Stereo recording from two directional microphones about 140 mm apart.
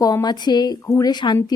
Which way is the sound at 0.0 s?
25° left (ahead or behind).